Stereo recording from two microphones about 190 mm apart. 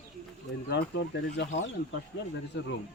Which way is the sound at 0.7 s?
65° left (ahead or behind).